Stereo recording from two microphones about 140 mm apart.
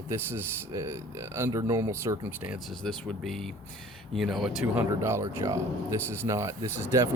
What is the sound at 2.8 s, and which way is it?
Speech, centre (ahead or behind).